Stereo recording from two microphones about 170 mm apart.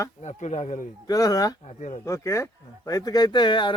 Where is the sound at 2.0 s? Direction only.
20° left (ahead or behind).